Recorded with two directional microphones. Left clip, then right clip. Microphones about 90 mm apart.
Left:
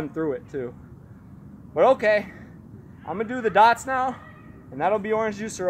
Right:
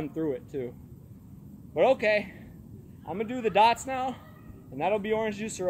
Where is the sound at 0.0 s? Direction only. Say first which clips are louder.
Left 4 dB; 30° right (ahead or behind).